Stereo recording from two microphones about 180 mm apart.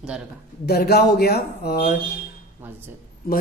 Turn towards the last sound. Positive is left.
turn(degrees=55)  # may be behind; listen again after turning